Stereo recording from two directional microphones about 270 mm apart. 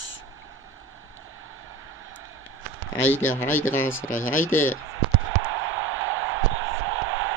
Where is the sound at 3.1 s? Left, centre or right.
Centre.